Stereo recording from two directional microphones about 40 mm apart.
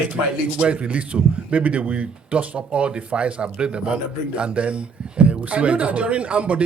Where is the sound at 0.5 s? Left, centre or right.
Right.